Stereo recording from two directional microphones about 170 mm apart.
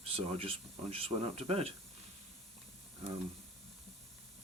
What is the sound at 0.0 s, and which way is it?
Speech, 35° right (ahead or behind).